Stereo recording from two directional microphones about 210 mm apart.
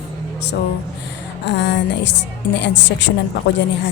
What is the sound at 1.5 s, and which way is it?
Speech, 55° left (ahead or behind).